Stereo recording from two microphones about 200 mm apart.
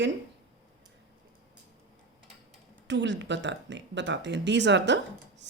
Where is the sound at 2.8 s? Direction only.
65° right (ahead or behind).